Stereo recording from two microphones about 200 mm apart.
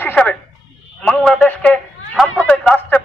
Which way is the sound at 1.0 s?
Centre (ahead or behind).